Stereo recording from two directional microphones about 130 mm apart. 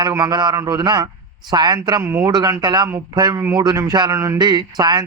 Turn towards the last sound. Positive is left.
turn(degrees=-30)  # may be behind; listen again after turning